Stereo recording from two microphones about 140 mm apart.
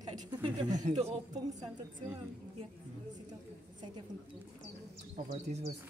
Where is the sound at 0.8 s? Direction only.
50° right (ahead or behind).